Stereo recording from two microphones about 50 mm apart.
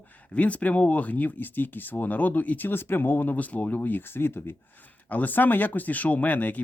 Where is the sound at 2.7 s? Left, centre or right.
Left.